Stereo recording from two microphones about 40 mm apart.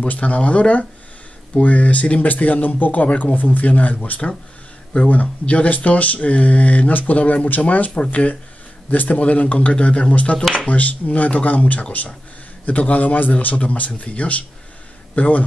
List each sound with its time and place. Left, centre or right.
0.0 s a man's voice: left
4.9 s a man's voice: left
8.9 s a man's voice: left